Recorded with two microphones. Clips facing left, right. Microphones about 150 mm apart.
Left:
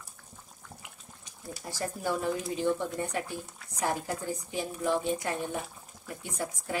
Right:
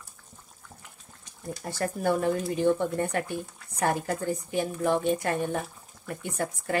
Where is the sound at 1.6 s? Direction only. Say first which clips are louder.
Right 6 dB; 60° right (ahead or behind).